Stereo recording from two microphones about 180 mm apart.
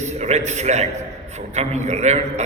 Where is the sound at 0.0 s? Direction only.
40° right (ahead or behind).